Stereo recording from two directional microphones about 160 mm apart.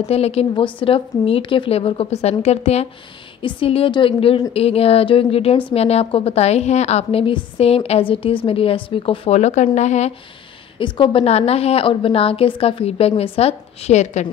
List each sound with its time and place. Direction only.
0.1 s a woman's voice: 40° left (ahead or behind)
10.8 s a woman's voice: 35° left (ahead or behind)